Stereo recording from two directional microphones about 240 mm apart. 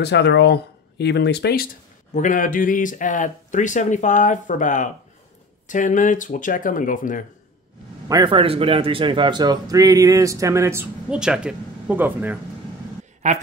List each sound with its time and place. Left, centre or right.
0.0 s speech: left
8.1 s speech: centre